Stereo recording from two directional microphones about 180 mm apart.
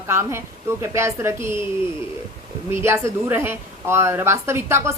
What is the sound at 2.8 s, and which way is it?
A woman's voice, 15° right (ahead or behind).